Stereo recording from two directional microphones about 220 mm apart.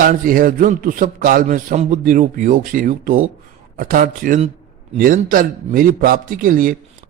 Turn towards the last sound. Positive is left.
turn(degrees=-40)  # may be behind; listen again after turning